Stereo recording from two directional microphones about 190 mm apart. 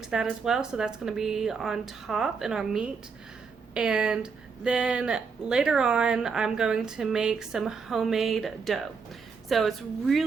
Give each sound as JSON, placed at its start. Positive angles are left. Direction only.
{"t": 0.0, "sound": "speech", "side_deg": 0}